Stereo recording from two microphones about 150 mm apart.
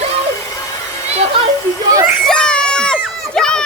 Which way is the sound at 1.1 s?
45° right (ahead or behind).